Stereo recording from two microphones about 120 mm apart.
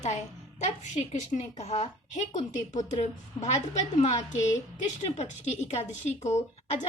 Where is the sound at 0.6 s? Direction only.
90° left.